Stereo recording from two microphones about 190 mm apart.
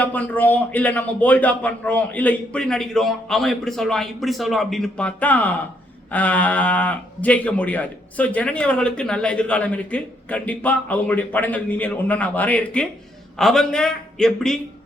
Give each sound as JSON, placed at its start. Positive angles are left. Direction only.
{"t": 0.0, "sound": "a man's voice", "side_deg": 10}